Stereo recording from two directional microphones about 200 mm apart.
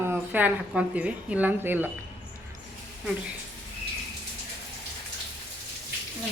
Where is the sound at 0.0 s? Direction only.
10° right (ahead or behind).